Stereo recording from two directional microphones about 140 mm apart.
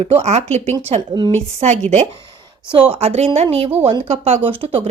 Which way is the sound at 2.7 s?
35° right (ahead or behind).